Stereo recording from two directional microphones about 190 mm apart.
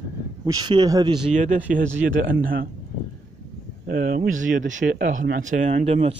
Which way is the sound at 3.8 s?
45° right (ahead or behind).